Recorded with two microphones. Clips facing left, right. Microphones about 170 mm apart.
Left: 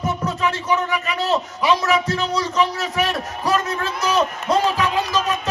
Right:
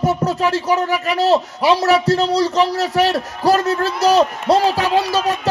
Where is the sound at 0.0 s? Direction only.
35° right (ahead or behind).